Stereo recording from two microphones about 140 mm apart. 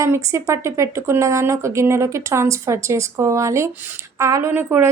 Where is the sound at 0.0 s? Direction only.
20° right (ahead or behind).